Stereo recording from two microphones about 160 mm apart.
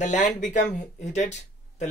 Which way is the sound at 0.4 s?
50° left (ahead or behind).